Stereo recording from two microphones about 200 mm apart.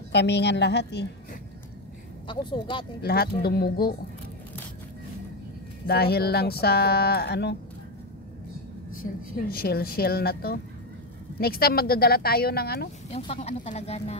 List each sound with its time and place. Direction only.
0.1 s a woman's voice: 55° left (ahead or behind)
2.2 s speech: 25° left (ahead or behind)
3.0 s speech: 50° left (ahead or behind)
5.9 s speech: 50° left (ahead or behind)
9.5 s speech: 50° left (ahead or behind)
13.1 s speech: 30° left (ahead or behind)